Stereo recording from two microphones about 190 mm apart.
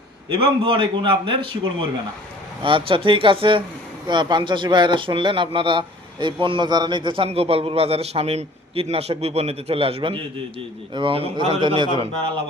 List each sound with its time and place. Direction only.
0.3 s a man's voice: 25° right (ahead or behind)
2.6 s a man's voice: 25° right (ahead or behind)